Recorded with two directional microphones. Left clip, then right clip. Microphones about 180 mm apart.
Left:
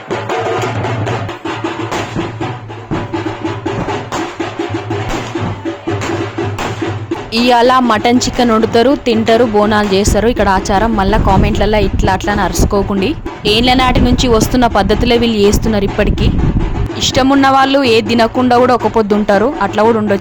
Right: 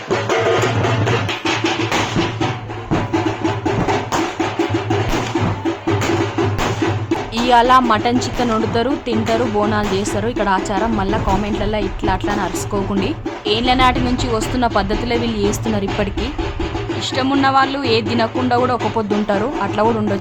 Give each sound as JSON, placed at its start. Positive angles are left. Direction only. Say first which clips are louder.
{"t": 7.3, "sound": "speech", "louder": "left 3 dB", "side_deg": 35}